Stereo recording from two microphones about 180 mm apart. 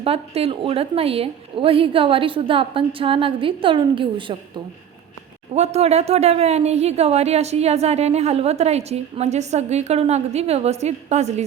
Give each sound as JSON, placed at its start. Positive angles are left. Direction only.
{"t": 0.0, "sound": "a woman's voice", "side_deg": -35}
{"t": 5.5, "sound": "a woman's voice", "side_deg": -35}